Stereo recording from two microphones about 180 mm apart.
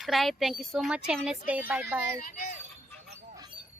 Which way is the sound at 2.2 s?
50° left (ahead or behind).